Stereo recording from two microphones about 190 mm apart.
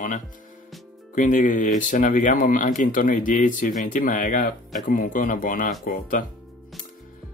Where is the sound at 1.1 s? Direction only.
45° left (ahead or behind).